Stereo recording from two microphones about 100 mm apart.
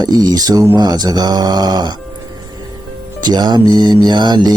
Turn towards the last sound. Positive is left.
turn(degrees=-45)  # may be behind; listen again after turning